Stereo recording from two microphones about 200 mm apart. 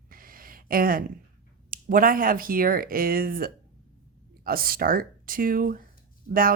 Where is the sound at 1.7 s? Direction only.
45° right (ahead or behind).